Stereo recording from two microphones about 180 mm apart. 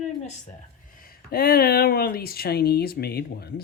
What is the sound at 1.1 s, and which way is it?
Speech, 55° left (ahead or behind).